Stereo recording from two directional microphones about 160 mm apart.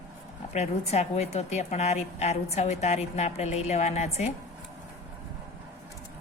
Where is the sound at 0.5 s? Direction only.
45° left (ahead or behind).